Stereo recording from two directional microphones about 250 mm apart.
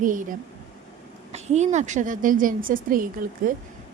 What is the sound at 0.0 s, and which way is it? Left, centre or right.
Speech, right.